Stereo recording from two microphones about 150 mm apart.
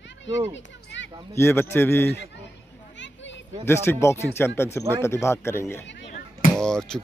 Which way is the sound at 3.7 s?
15° left (ahead or behind).